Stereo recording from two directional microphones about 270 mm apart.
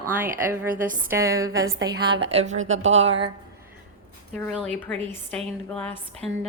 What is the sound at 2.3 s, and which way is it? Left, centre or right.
Speech, right.